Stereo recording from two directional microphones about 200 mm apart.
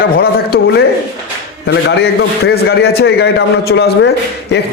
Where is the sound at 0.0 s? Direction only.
50° left (ahead or behind).